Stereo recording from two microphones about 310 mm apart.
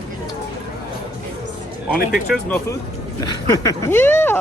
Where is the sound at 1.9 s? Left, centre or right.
Left.